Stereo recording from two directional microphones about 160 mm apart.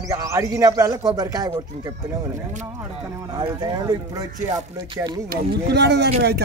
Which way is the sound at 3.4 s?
25° right (ahead or behind).